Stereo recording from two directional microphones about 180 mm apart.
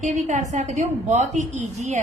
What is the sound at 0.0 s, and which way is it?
A woman's voice, 40° right (ahead or behind).